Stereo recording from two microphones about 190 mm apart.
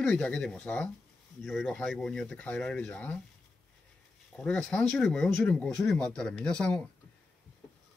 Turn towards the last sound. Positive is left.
turn(degrees=5)  # may be behind; listen again after turning